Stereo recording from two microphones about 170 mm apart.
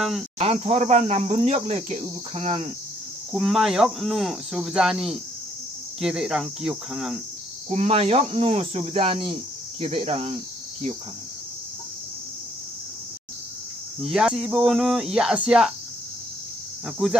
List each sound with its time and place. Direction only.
0.4 s speech: 40° right (ahead or behind)
3.3 s speech: centre (ahead or behind)
7.7 s speech: 40° right (ahead or behind)
14.0 s speech: centre (ahead or behind)
16.8 s speech: 5° right (ahead or behind)